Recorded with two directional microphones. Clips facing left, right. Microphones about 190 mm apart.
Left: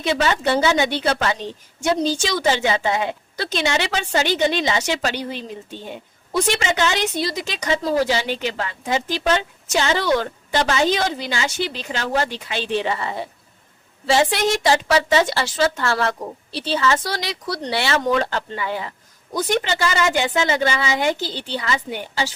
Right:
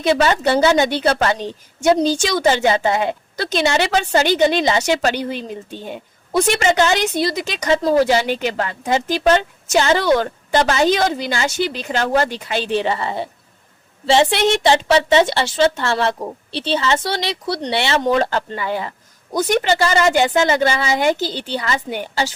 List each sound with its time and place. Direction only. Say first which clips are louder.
0.0 s a woman's voice: right 4 dB; 40° right (ahead or behind)